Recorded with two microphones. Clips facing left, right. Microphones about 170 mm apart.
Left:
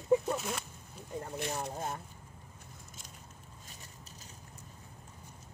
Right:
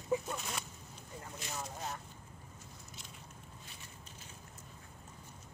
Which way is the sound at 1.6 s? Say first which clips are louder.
Left 5 dB; 50° left (ahead or behind).